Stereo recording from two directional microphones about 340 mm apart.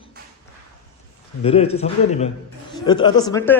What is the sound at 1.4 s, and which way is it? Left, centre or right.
Speech, centre.